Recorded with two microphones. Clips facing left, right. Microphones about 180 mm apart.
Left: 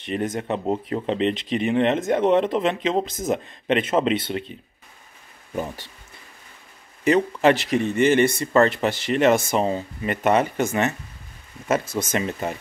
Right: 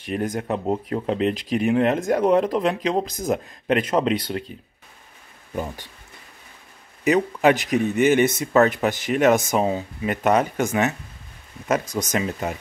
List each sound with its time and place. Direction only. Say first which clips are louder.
0.0 s speech: even; centre (ahead or behind)
7.1 s speech: even; centre (ahead or behind)
11.8 s speech: even; 15° right (ahead or behind)
12.2 s speech: right 2 dB; centre (ahead or behind)